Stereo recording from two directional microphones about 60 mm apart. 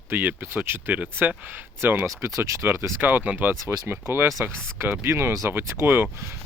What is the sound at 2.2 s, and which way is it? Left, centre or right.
Speech, right.